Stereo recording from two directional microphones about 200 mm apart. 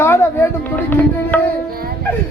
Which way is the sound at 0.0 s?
10° left (ahead or behind).